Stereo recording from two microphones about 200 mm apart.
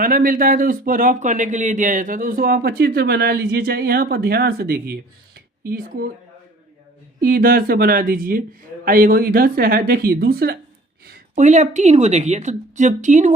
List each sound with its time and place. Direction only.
0.0 s speech: 45° right (ahead or behind)
7.2 s speech: 45° right (ahead or behind)
11.3 s a woman's voice: 35° right (ahead or behind)